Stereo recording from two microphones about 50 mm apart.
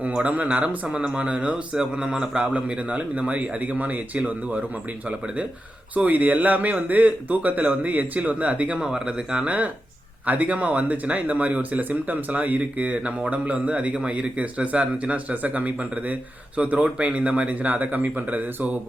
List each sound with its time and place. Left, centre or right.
0.0 s speech: right
2.5 s speech: right
10.2 s speech: right